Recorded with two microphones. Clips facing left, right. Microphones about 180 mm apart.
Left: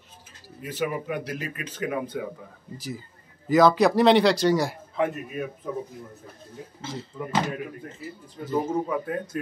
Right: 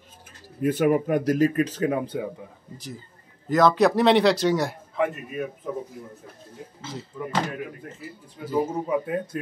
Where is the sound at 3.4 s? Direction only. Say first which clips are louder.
Left 1 dB; centre (ahead or behind).